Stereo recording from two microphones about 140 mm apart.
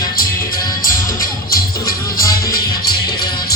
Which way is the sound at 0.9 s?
90° left.